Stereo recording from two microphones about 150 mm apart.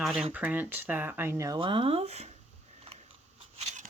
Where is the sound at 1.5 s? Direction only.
35° right (ahead or behind).